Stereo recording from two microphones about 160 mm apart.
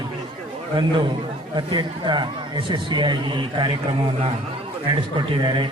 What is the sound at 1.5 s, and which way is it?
Speech, 30° right (ahead or behind).